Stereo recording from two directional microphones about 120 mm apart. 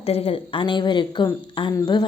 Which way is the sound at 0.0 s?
55° left (ahead or behind).